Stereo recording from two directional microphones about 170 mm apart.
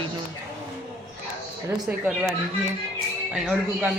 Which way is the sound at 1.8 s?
10° right (ahead or behind).